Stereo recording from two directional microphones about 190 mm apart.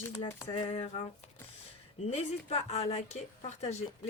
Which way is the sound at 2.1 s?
35° left (ahead or behind).